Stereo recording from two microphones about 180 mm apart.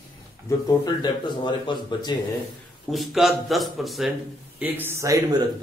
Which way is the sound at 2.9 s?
Centre (ahead or behind).